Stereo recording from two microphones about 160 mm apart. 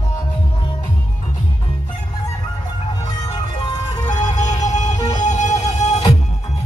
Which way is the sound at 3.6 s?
25° left (ahead or behind).